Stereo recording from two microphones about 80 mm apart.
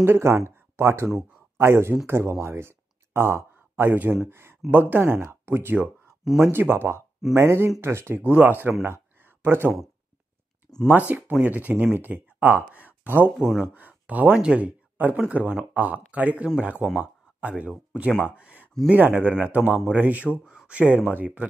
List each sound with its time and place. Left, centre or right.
0.0 s speech: right
8.2 s speech: right
8.8 s a sound: right
10.9 s speech: right
12.7 s a sound: right
13.4 s speech: centre
13.7 s speech: centre
18.3 s a sound: centre
18.9 s speech: right